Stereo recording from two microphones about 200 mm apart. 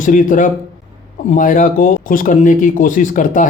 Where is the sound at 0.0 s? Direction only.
40° left (ahead or behind).